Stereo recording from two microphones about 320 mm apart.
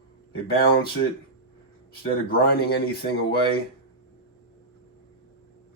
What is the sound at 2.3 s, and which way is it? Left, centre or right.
Speech, left.